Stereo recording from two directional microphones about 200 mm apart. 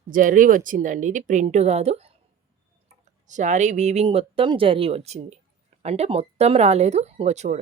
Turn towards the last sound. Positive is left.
turn(degrees=-35)  # may be behind; listen again after turning